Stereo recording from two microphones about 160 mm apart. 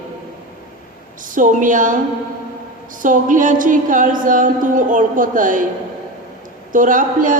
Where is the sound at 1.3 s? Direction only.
55° right (ahead or behind).